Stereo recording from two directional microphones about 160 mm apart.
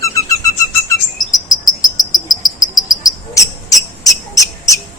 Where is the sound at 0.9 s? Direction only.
25° left (ahead or behind).